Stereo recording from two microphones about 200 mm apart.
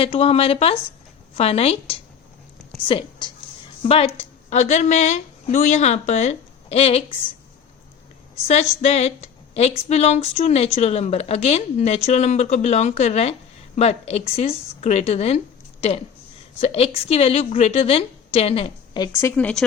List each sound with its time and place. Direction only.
0.0 s a woman's voice: 30° left (ahead or behind)
8.4 s speech: 30° left (ahead or behind)
16.6 s a woman's voice: 30° left (ahead or behind)
19.4 s speech: 5° left (ahead or behind)